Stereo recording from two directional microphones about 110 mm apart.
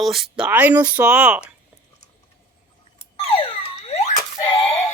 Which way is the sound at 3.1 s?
60° left (ahead or behind).